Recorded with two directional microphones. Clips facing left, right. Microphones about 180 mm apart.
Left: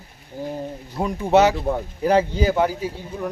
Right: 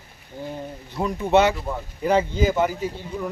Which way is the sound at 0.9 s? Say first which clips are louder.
Left 1 dB; 10° left (ahead or behind).